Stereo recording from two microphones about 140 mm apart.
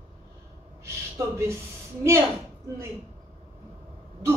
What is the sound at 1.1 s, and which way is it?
Speech, 20° right (ahead or behind).